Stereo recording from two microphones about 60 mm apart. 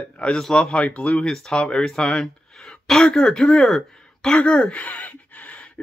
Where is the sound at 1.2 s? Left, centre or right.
Centre.